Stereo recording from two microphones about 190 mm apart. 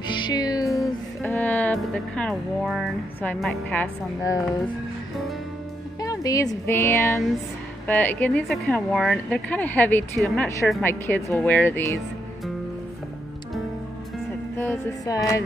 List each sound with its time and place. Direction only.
0.1 s music: 20° left (ahead or behind); by 2.9 s centre (ahead or behind)
3.2 s a woman's voice: 5° left (ahead or behind)
4.2 s speech: 15° left (ahead or behind)
5.9 s speech: 20° left (ahead or behind)
14.6 s music: 10° left (ahead or behind)